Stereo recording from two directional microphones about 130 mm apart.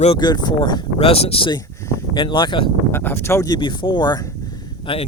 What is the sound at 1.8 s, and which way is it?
Speech, 35° left (ahead or behind).